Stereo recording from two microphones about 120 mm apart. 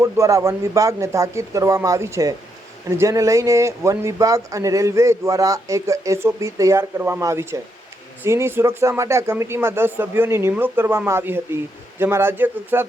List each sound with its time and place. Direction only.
0.0 s speech: 25° right (ahead or behind)